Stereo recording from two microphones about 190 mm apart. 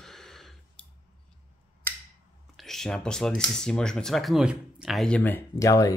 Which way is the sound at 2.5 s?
Centre (ahead or behind).